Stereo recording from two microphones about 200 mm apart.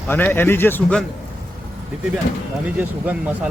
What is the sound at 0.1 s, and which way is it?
Speech, 10° left (ahead or behind).